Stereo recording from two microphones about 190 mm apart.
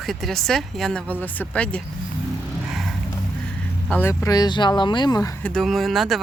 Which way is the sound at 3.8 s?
10° left (ahead or behind).